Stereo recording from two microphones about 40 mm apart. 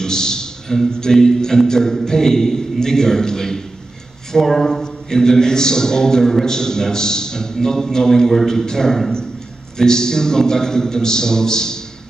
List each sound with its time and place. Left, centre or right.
0.0 s a man's voice: centre